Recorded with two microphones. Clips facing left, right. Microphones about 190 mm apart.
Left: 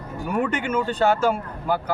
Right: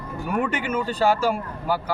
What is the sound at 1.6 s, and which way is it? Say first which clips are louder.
Speech: left 1 dB; 50° left (ahead or behind).